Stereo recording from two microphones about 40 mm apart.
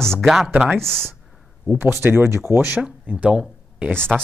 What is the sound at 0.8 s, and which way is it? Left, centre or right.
Speech, centre.